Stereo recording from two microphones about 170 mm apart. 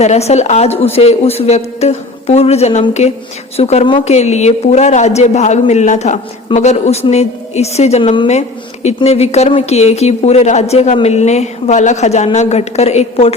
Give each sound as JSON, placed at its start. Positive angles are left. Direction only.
{"t": 0.0, "sound": "a woman's voice", "side_deg": 40}